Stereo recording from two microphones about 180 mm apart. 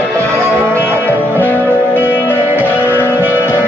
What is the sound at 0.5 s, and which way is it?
Music, 15° right (ahead or behind).